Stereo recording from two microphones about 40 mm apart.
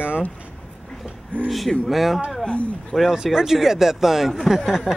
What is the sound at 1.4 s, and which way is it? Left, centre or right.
Speech, centre.